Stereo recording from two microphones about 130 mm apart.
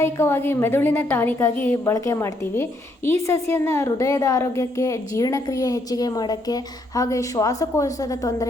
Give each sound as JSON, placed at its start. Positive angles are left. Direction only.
{"t": 0.0, "sound": "a woman's voice", "side_deg": 20}